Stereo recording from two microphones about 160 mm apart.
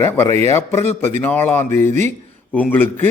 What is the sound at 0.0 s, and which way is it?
A man's voice, 15° left (ahead or behind).